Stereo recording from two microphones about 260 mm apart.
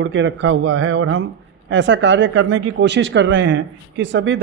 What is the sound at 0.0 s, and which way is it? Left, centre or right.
Speech, right.